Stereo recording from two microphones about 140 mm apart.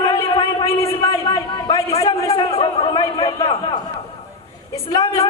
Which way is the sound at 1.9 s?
45° left (ahead or behind).